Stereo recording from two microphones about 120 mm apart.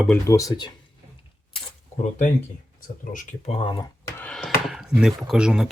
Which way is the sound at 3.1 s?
90° left.